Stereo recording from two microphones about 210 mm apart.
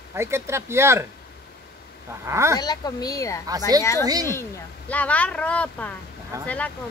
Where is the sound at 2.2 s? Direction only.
15° right (ahead or behind).